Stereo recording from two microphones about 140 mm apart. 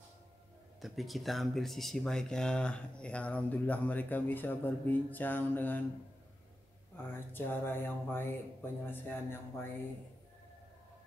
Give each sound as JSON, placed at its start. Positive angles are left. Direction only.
{"t": 0.7, "sound": "speech", "side_deg": 0}
{"t": 7.0, "sound": "speech", "side_deg": 15}